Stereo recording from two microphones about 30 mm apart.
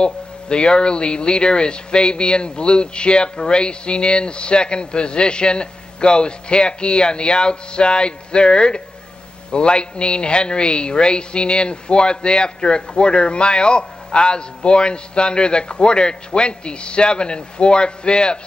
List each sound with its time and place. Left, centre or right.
0.0 s speech: left